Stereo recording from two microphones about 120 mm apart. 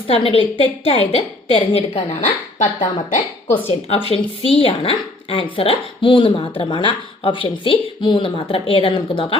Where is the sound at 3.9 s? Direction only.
55° left (ahead or behind).